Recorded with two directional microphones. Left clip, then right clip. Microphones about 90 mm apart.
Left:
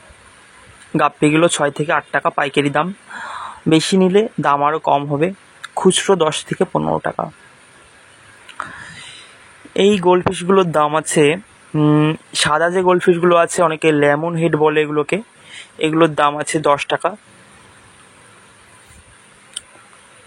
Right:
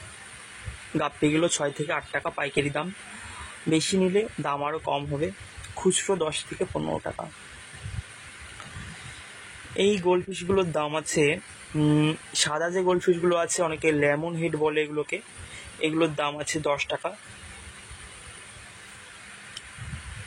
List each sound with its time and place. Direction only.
0.9 s speech: 65° left (ahead or behind); by 6.8 s 90° left
6.8 s speech: 45° left (ahead or behind)
8.6 s a sound: 60° left (ahead or behind)
9.8 s speech: 65° left (ahead or behind)
11.7 s speech: 35° left (ahead or behind)
12.4 s speech: 65° left (ahead or behind); by 14.6 s 45° left (ahead or behind)
14.6 s speech: 60° left (ahead or behind)